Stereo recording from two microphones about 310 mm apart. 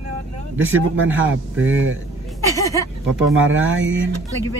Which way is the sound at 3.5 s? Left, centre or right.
Right.